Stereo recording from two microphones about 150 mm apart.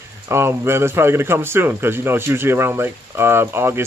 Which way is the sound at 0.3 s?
15° right (ahead or behind).